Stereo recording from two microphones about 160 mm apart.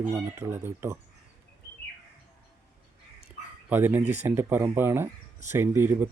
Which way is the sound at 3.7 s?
10° right (ahead or behind).